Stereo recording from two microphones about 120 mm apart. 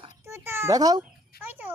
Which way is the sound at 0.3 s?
20° right (ahead or behind).